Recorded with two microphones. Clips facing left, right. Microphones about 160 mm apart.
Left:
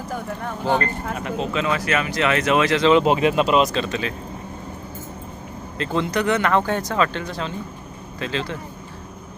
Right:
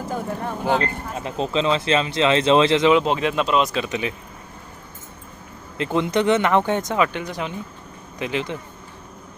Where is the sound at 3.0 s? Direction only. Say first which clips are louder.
Left 3 dB; 5° left (ahead or behind).